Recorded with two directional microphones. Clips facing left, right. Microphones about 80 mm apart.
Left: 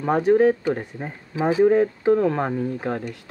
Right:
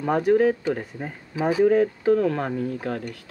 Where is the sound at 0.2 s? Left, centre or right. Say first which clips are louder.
Left 3 dB; left.